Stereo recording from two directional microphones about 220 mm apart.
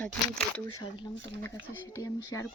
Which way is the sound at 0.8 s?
20° left (ahead or behind).